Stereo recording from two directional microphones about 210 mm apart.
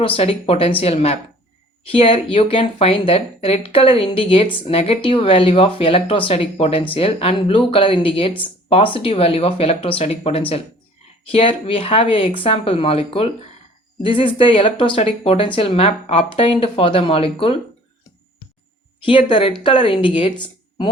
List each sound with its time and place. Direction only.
0.0 s speech: 25° left (ahead or behind)
19.0 s speech: 25° left (ahead or behind)